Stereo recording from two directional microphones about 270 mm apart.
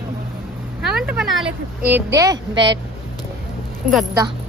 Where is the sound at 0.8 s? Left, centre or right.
Centre.